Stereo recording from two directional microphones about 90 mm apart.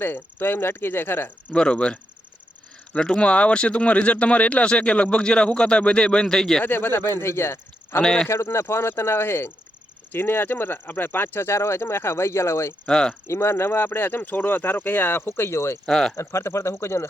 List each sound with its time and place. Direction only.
0.0 s speech: 25° left (ahead or behind)
1.5 s speech: 10° left (ahead or behind)
6.6 s speech: 25° left (ahead or behind)
8.0 s speech: 5° left (ahead or behind)
8.3 s speech: 30° left (ahead or behind)
12.8 s speech: 10° left (ahead or behind)
13.2 s speech: 30° left (ahead or behind)
15.9 s speech: 5° left (ahead or behind)
16.1 s speech: 30° left (ahead or behind)